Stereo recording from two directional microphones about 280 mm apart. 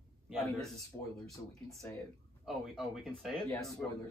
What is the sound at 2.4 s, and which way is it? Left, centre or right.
Speech, centre.